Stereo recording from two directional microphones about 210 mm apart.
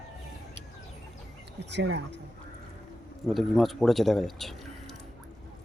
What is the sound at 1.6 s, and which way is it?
Speech, 55° right (ahead or behind).